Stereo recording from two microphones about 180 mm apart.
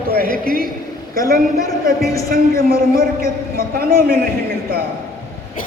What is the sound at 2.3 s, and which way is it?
A man's voice, 55° right (ahead or behind).